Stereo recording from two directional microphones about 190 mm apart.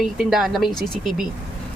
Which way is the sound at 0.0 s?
Centre (ahead or behind).